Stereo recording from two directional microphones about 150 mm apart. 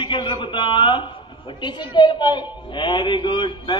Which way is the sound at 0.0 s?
30° left (ahead or behind).